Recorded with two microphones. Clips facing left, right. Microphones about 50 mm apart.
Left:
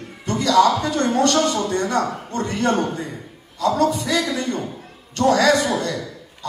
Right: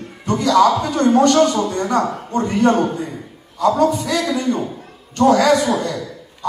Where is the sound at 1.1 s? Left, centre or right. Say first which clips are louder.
Right 6 dB; centre.